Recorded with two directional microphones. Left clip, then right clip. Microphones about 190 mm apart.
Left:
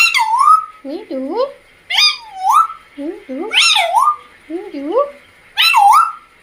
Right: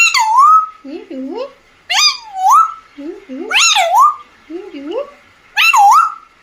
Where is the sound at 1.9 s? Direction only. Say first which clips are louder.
Right 1 dB; 40° right (ahead or behind).